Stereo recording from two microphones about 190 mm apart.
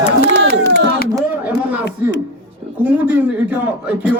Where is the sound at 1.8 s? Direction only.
65° left (ahead or behind).